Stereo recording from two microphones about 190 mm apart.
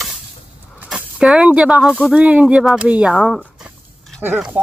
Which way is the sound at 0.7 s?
5° right (ahead or behind).